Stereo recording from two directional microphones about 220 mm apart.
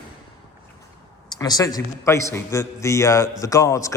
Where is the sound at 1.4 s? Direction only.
15° left (ahead or behind).